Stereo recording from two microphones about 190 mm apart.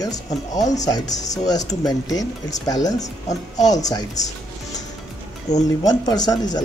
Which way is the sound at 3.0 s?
40° left (ahead or behind).